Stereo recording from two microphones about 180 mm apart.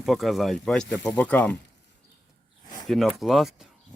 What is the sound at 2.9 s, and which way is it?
Speech, centre (ahead or behind).